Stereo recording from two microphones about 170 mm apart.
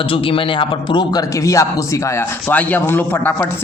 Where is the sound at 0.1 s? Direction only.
30° left (ahead or behind).